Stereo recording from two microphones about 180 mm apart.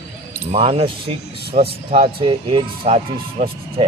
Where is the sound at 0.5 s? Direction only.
35° right (ahead or behind).